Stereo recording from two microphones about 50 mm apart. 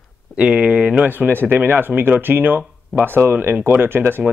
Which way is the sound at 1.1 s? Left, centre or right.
Right.